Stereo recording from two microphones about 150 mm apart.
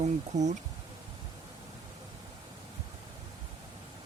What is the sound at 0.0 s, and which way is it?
Speech, 50° right (ahead or behind).